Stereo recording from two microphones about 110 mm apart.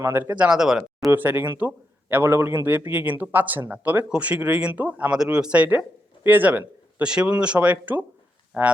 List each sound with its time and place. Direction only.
0.0 s a man's voice: 20° right (ahead or behind)
1.1 s a man's voice: 15° right (ahead or behind)